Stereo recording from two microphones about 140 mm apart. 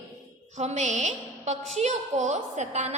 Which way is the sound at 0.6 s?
55° right (ahead or behind).